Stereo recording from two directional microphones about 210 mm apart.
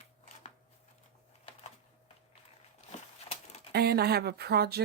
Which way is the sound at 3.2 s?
25° left (ahead or behind).